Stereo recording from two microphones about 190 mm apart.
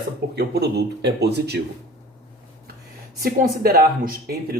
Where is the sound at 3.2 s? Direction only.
55° right (ahead or behind).